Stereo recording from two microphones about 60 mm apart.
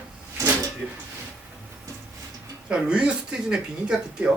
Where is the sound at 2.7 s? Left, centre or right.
Centre.